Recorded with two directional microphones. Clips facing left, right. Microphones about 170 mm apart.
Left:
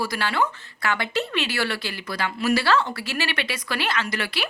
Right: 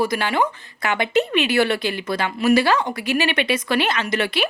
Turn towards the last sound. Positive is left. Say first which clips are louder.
# right 6 dB
turn(degrees=-20)  # may be behind; listen again after turning